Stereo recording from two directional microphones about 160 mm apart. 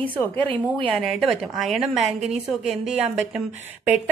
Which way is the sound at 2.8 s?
45° right (ahead or behind).